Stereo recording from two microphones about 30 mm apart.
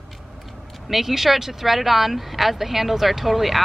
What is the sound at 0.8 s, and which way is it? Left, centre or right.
Speech, centre.